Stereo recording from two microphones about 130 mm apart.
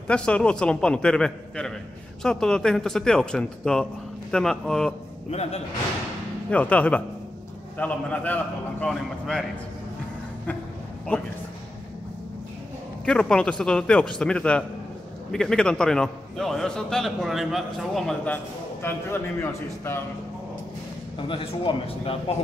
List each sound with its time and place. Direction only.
0.1 s a man's voice: 10° left (ahead or behind)
5.3 s speech: 55° left (ahead or behind)
6.5 s a man's voice: 10° left (ahead or behind)
11.1 s a man's voice: 10° left (ahead or behind)
13.0 s a man's voice: 5° left (ahead or behind)
21.2 s speech: 40° left (ahead or behind)